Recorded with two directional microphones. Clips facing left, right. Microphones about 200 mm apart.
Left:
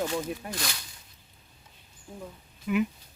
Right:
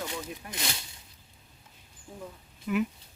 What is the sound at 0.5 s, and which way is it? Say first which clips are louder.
Speech: left 1 dB; 20° right (ahead or behind).